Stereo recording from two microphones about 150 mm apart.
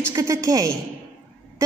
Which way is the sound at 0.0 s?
20° right (ahead or behind).